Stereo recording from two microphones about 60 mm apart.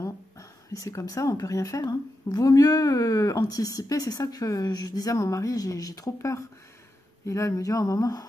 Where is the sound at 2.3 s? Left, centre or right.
Left.